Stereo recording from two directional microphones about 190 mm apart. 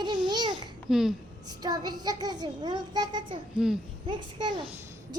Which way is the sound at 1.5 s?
20° right (ahead or behind).